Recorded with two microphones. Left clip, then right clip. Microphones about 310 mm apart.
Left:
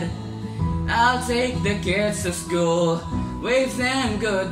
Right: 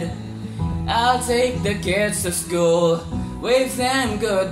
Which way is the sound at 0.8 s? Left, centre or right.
Centre.